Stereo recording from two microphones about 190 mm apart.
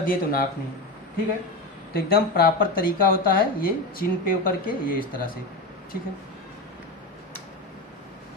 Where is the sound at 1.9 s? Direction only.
55° left (ahead or behind).